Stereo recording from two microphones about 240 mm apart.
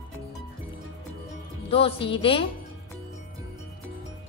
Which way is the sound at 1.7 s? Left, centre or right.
Left.